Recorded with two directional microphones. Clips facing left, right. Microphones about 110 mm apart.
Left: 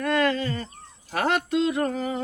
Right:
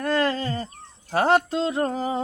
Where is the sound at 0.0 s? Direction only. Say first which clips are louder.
Even; 30° right (ahead or behind).